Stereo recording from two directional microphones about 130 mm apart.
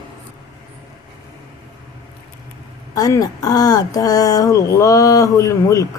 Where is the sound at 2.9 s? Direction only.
30° left (ahead or behind).